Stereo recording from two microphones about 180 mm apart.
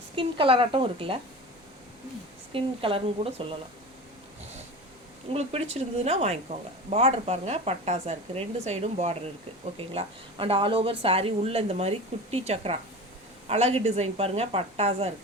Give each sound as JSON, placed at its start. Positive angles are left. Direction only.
{"t": 0.2, "sound": "a woman's voice", "side_deg": -30}
{"t": 2.5, "sound": "speech", "side_deg": -30}
{"t": 5.3, "sound": "speech", "side_deg": -35}